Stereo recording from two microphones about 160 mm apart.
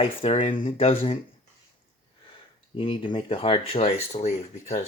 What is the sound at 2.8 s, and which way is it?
Speech, 30° left (ahead or behind).